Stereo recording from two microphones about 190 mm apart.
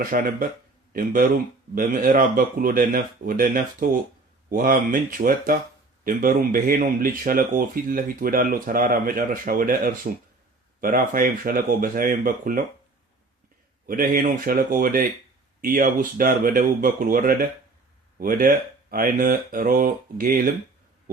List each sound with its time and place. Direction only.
0.0 s speech: 45° right (ahead or behind)
13.8 s speech: 45° right (ahead or behind)